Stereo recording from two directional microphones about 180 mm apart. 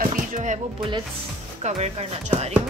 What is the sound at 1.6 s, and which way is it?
Speech, 40° right (ahead or behind).